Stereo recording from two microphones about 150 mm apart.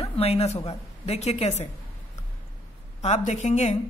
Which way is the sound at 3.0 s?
50° left (ahead or behind).